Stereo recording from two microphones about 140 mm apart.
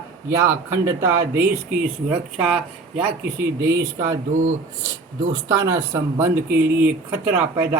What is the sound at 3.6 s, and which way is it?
Speech, 20° right (ahead or behind).